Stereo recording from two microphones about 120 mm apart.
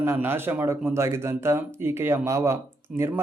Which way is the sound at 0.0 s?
20° right (ahead or behind).